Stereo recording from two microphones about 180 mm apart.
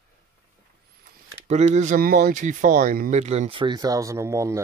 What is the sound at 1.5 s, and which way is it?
Speech, 40° right (ahead or behind).